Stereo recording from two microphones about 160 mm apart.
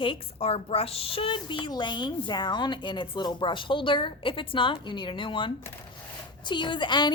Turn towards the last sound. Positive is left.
turn(degrees=30)  # may be behind; listen again after turning